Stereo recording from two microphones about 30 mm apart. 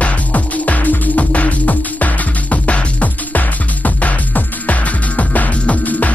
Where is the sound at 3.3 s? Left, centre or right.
Left.